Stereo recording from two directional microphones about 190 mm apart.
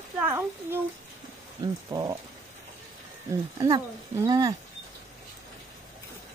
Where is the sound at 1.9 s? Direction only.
25° right (ahead or behind).